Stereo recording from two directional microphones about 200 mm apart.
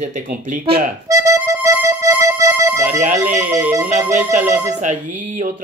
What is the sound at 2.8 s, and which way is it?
Music, 35° right (ahead or behind).